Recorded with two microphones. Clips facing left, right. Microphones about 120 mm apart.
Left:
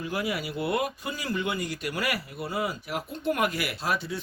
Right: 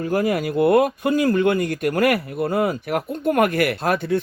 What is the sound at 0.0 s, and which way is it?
Speech, 45° right (ahead or behind).